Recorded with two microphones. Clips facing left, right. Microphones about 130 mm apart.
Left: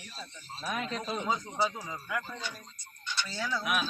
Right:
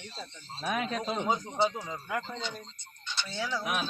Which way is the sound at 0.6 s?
75° right (ahead or behind).